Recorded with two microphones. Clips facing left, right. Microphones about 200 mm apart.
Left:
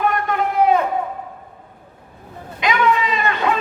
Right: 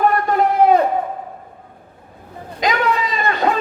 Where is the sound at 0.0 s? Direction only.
35° right (ahead or behind).